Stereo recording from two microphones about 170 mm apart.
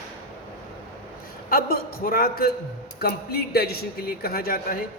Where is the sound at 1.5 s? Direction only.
60° left (ahead or behind).